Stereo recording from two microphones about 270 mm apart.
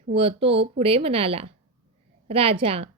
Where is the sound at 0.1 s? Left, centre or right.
Right.